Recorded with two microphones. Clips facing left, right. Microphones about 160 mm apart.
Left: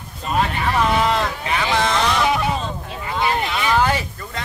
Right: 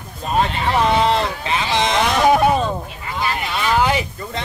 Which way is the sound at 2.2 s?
50° right (ahead or behind).